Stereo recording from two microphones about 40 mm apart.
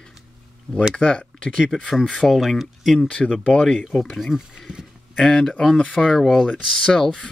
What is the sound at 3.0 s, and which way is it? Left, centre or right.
Speech, left.